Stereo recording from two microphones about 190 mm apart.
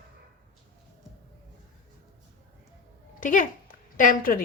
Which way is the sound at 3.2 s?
45° left (ahead or behind).